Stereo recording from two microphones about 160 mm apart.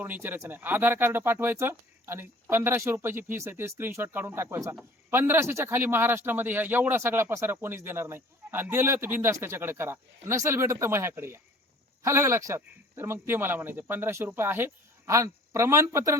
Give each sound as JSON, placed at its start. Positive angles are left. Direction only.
{"t": 0.0, "sound": "speech", "side_deg": -10}